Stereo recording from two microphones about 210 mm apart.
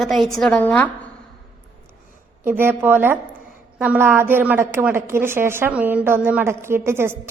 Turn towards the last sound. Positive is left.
turn(degrees=-10)  # may be behind; listen again after turning